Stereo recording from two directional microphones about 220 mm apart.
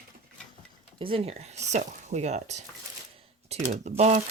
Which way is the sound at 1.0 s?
25° right (ahead or behind).